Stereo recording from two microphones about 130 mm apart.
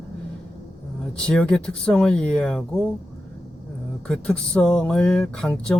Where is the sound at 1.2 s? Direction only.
5° left (ahead or behind).